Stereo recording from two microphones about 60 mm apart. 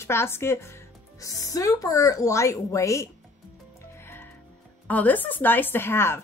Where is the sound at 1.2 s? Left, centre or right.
Left.